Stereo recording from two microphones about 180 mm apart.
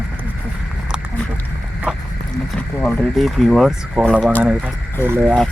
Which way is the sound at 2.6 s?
5° left (ahead or behind).